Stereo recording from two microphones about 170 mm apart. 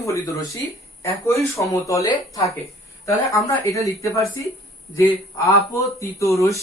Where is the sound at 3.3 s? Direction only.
20° left (ahead or behind).